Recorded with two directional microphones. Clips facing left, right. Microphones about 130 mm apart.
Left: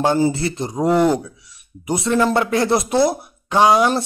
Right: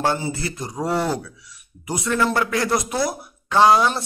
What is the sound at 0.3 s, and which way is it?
Speech, 25° left (ahead or behind).